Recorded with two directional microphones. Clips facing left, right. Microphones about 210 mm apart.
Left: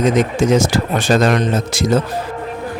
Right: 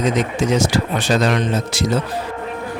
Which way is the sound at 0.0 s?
50° left (ahead or behind).